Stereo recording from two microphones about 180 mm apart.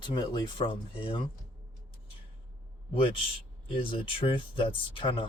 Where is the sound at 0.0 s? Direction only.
25° left (ahead or behind).